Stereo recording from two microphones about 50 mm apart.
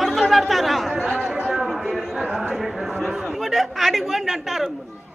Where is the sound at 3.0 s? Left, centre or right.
Centre.